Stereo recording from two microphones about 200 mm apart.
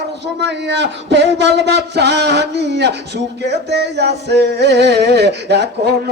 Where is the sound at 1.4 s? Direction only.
60° right (ahead or behind).